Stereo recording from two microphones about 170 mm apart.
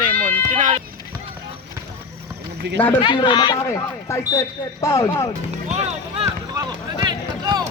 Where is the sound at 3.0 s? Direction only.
25° left (ahead or behind).